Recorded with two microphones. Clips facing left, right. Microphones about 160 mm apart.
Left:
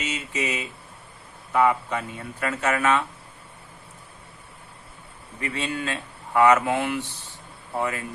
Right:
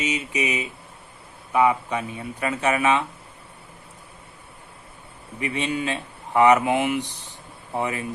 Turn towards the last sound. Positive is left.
turn(degrees=-20)  # may be behind; listen again after turning